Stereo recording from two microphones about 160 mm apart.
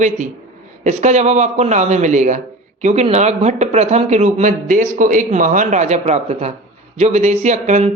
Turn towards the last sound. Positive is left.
turn(degrees=-50)  # may be behind; listen again after turning